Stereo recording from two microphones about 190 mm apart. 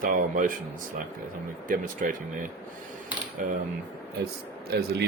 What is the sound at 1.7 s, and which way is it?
Speech, 45° right (ahead or behind).